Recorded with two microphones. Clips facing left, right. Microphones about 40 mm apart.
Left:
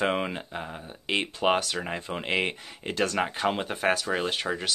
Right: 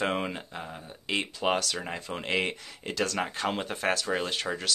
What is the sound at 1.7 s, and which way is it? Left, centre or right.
Speech, centre.